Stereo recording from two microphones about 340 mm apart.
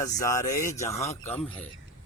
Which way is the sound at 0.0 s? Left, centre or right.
Centre.